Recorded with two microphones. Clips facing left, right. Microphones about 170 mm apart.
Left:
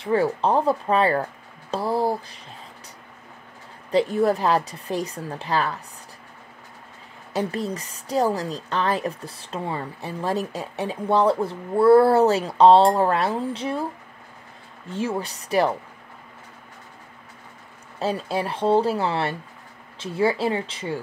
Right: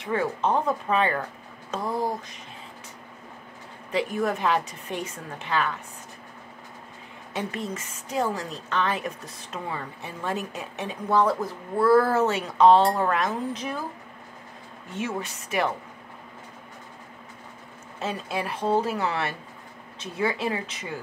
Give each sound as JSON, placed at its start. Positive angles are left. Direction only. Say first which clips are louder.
{"t": 0.0, "sound": "a woman's voice", "louder": "left 5 dB", "side_deg": 30}
{"t": 3.9, "sound": "a woman's voice", "louder": "left 6 dB", "side_deg": 35}
{"t": 7.3, "sound": "a woman's voice", "louder": "left 5 dB", "side_deg": 35}
{"t": 14.9, "sound": "a woman's voice", "louder": "left 4 dB", "side_deg": 30}
{"t": 17.9, "sound": "a woman's voice", "louder": "left 5 dB", "side_deg": 35}